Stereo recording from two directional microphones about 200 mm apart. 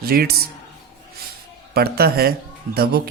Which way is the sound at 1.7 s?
50° right (ahead or behind).